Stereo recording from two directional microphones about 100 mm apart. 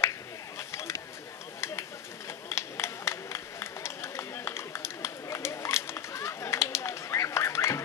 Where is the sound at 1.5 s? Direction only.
25° left (ahead or behind).